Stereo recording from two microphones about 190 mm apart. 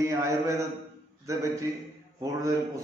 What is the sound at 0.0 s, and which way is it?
A man's voice, 15° right (ahead or behind).